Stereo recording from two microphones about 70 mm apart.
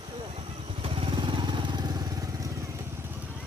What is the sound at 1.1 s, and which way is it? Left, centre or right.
Vehicle, right.